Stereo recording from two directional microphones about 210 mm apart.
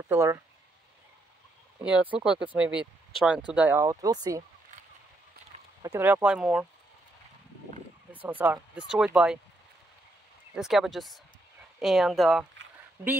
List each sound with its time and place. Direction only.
0.1 s speech: 10° right (ahead or behind)
1.9 s speech: 5° right (ahead or behind)
5.8 s speech: 10° right (ahead or behind)
8.1 s speech: 5° right (ahead or behind)
10.5 s speech: centre (ahead or behind)